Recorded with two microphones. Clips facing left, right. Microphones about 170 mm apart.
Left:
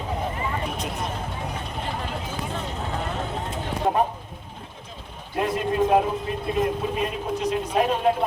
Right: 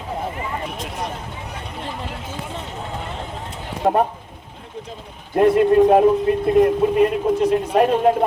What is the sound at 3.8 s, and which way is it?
Speech, 50° right (ahead or behind).